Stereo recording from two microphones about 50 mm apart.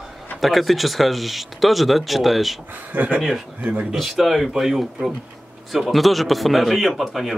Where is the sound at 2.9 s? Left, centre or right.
Right.